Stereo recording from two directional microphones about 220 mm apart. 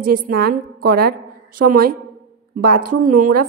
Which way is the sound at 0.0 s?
45° right (ahead or behind).